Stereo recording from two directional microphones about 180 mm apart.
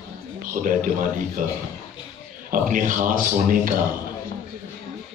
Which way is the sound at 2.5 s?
50° right (ahead or behind).